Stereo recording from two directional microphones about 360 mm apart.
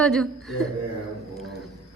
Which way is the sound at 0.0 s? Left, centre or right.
Centre.